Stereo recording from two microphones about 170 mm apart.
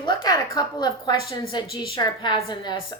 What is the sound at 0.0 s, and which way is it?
A woman's voice, 25° left (ahead or behind).